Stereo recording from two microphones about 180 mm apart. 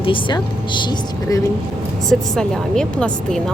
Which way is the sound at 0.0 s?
30° left (ahead or behind).